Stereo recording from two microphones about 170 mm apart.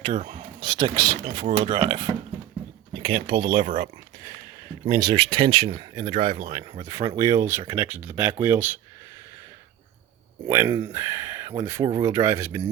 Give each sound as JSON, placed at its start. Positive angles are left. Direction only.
{"t": 0.0, "sound": "speech", "side_deg": -35}
{"t": 5.0, "sound": "speech", "side_deg": -30}
{"t": 10.4, "sound": "speech", "side_deg": -20}